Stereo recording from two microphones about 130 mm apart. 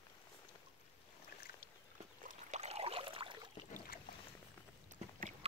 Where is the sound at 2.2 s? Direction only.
60° right (ahead or behind); by 3.5 s 40° right (ahead or behind).